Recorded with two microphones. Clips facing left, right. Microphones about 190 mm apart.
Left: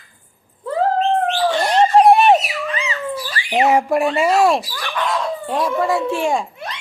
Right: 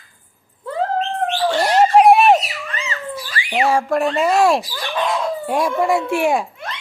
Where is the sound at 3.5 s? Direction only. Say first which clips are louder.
Left 2 dB; 20° left (ahead or behind); by 4.6 s centre (ahead or behind).